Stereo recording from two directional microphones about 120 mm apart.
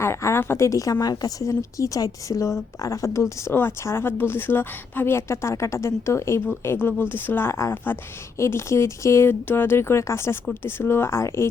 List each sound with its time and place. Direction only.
0.0 s speech: 25° left (ahead or behind)